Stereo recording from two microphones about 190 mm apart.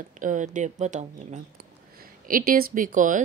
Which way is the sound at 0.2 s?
40° right (ahead or behind).